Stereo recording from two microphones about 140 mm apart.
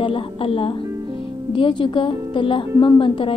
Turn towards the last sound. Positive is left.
turn(degrees=40)  # may be behind; listen again after turning